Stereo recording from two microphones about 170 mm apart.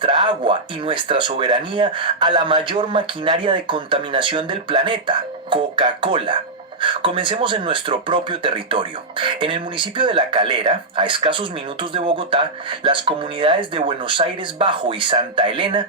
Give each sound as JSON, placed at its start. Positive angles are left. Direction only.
{"t": 0.0, "sound": "speech", "side_deg": -30}